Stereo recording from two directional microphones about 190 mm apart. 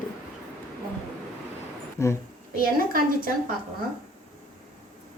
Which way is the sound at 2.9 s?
50° right (ahead or behind).